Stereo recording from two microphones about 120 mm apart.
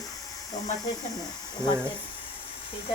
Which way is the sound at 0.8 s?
30° left (ahead or behind).